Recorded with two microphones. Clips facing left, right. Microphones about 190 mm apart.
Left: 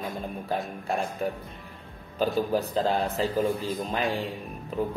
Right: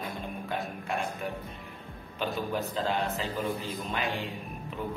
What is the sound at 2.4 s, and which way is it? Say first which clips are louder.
A man's voice: left 5 dB; 35° left (ahead or behind).